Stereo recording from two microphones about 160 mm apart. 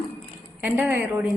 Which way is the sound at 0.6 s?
10° right (ahead or behind).